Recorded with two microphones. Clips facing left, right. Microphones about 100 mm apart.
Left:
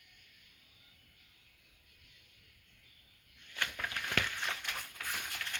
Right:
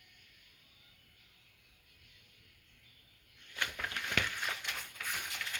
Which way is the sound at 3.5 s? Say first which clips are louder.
Even; 15° right (ahead or behind).